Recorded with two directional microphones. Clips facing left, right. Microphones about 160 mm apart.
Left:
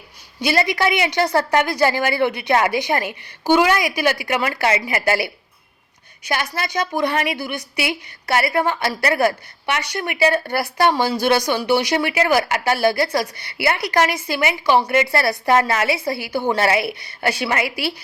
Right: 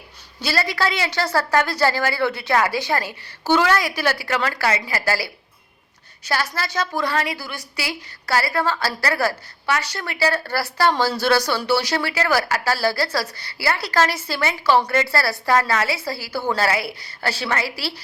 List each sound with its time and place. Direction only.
0.4 s a woman's voice: 15° left (ahead or behind)